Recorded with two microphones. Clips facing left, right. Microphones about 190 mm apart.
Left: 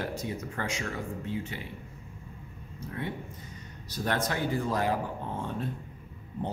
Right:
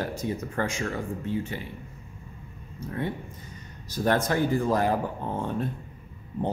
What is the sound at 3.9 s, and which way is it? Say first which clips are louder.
Speech: right 6 dB; 45° right (ahead or behind).